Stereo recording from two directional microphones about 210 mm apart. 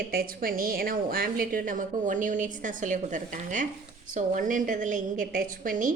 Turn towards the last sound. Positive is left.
turn(degrees=-40)  # may be behind; listen again after turning